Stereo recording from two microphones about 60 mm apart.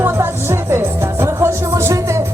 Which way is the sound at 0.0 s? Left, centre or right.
Right.